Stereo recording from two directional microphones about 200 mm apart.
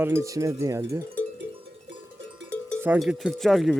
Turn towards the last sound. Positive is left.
turn(degrees=0)  # may be behind; listen again after turning